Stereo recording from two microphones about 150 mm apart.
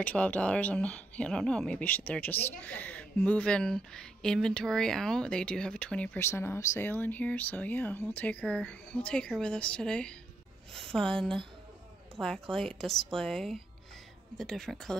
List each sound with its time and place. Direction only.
0.0 s speech: 10° left (ahead or behind)
12.5 s speech: 5° left (ahead or behind)